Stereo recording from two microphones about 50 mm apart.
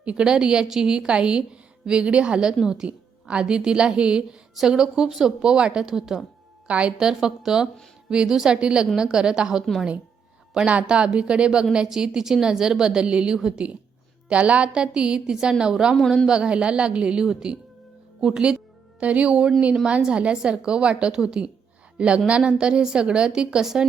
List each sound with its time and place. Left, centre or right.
0.0 s a woman's voice: right
6.7 s a woman's voice: right
7.0 s a woman's voice: centre
10.7 s a woman's voice: right
16.0 s a man's voice: centre
16.2 s a woman's voice: centre
18.9 s a woman's voice: right